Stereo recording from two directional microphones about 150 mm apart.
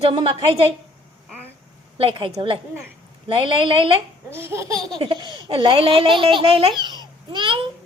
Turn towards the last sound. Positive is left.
turn(degrees=-35)  # may be behind; listen again after turning